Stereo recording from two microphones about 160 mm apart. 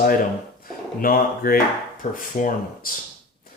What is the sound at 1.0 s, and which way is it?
Speech, 65° left (ahead or behind).